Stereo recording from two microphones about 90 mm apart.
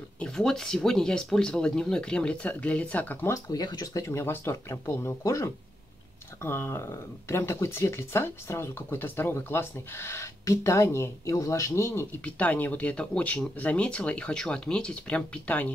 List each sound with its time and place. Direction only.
0.2 s speech: 5° left (ahead or behind)
3.4 s speech: 50° left (ahead or behind)
4.0 s speech: 25° left (ahead or behind)
12.3 s speech: 15° left (ahead or behind)